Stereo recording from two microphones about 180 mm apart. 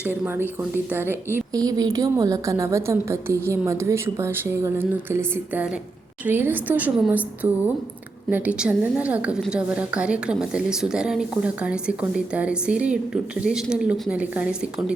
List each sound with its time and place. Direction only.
0.0 s a woman's voice: 10° right (ahead or behind)